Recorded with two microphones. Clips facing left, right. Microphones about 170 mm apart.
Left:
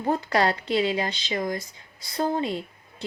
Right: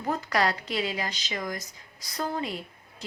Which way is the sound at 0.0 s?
30° left (ahead or behind).